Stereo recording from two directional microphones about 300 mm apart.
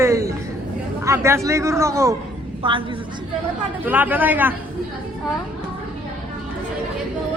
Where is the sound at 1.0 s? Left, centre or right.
Centre.